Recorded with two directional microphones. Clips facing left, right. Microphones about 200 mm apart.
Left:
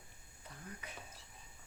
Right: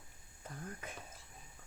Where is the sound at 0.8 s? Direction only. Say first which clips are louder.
Right 4 dB; 50° right (ahead or behind).